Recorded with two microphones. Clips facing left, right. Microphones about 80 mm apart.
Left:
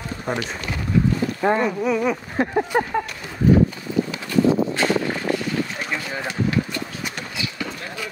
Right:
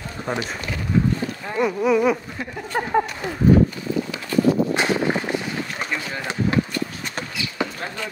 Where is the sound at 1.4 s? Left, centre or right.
Left.